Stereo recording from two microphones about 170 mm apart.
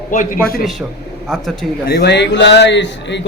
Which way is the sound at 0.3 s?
5° left (ahead or behind).